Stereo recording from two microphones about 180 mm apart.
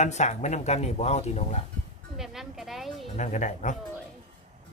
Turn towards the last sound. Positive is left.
turn(degrees=40)  # may be behind; listen again after turning